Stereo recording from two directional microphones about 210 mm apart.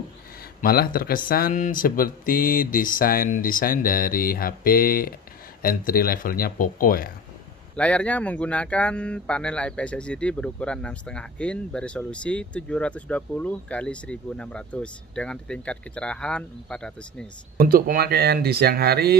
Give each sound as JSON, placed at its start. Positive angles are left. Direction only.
{"t": 0.6, "sound": "speech", "side_deg": 45}
{"t": 7.7, "sound": "speech", "side_deg": 5}
{"t": 17.6, "sound": "speech", "side_deg": -45}